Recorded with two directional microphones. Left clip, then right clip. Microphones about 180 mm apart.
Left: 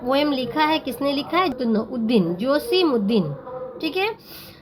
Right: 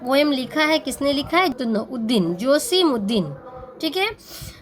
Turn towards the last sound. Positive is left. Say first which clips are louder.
# right 1 dB
turn(degrees=-25)  # may be behind; listen again after turning